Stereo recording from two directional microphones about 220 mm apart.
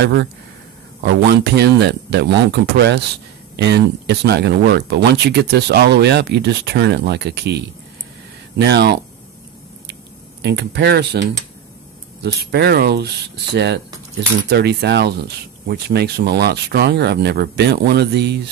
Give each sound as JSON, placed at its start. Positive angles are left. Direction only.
{"t": 0.0, "sound": "speech", "side_deg": -50}
{"t": 10.4, "sound": "speech", "side_deg": -50}
{"t": 14.5, "sound": "speech", "side_deg": -50}